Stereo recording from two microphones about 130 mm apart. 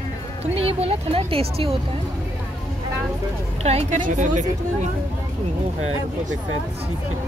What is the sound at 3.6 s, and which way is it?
Speech, 55° right (ahead or behind).